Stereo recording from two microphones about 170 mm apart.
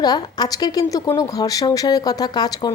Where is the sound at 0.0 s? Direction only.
25° left (ahead or behind).